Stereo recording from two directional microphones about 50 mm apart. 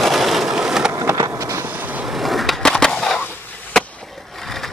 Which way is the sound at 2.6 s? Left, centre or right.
Centre.